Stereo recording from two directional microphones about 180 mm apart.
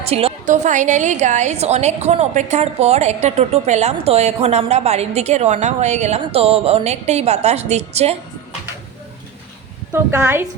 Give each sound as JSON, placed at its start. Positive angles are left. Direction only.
{"t": 0.1, "sound": "a woman's voice", "side_deg": -30}
{"t": 0.4, "sound": "a woman's voice", "side_deg": -45}
{"t": 9.9, "sound": "a woman's voice", "side_deg": -15}